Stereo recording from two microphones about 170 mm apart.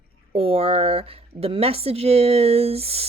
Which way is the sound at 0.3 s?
35° right (ahead or behind).